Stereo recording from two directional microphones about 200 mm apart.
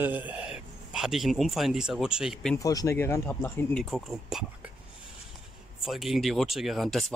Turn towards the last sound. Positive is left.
turn(degrees=0)  # may be behind; listen again after turning